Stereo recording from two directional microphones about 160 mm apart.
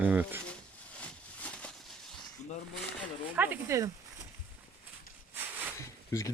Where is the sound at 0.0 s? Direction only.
10° right (ahead or behind).